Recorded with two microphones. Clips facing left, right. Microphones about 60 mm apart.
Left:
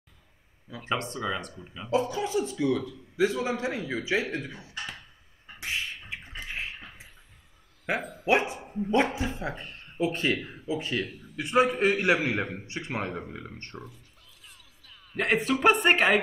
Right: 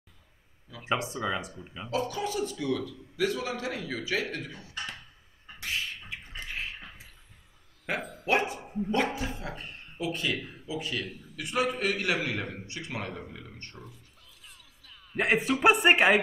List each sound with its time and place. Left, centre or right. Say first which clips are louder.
0.8 s a man's voice: even; centre
1.9 s a man's voice: left 4 dB; left
5.6 s beatboxing: left 1 dB; left
6.4 s a sound: left 1 dB; centre
7.8 s a sound: left 3 dB; centre
8.3 s speech: left 3 dB; left
8.5 s dog: even; centre
8.9 s a man's voice: left 4 dB; left
14.4 s music: even; centre
15.1 s a man's voice: even; centre